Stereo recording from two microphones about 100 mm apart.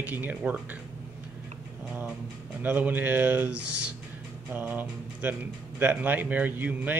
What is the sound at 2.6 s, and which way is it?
Speech, 20° right (ahead or behind).